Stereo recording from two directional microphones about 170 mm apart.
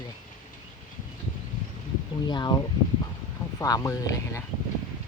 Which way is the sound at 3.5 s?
20° left (ahead or behind).